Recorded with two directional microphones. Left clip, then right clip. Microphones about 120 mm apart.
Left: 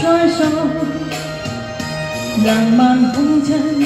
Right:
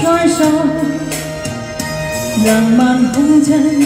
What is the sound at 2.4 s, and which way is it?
Music, 25° right (ahead or behind).